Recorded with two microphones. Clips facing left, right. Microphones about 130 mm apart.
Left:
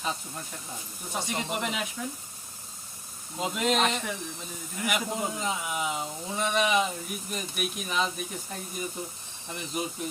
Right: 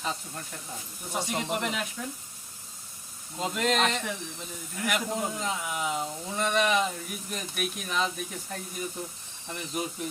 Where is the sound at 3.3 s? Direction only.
10° left (ahead or behind).